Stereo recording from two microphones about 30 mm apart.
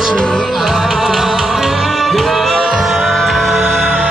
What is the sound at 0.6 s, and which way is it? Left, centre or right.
Music, centre.